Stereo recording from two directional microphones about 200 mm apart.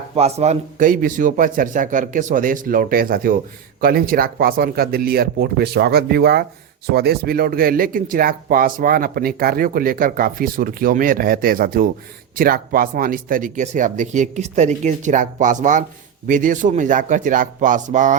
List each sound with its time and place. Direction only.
0.2 s speech: 30° right (ahead or behind)